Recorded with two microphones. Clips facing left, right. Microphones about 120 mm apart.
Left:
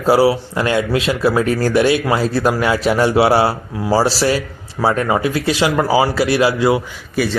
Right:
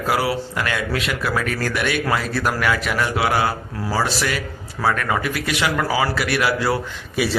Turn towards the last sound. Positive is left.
turn(degrees=0)  # may be behind; listen again after turning